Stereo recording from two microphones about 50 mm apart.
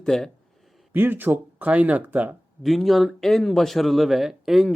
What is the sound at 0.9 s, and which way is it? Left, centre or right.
Speech, right.